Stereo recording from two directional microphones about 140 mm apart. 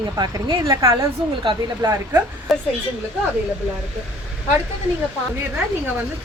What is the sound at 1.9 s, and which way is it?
Speech, 15° right (ahead or behind).